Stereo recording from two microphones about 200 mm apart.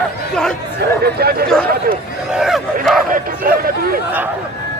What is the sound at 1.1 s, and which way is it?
Chatter, 50° right (ahead or behind).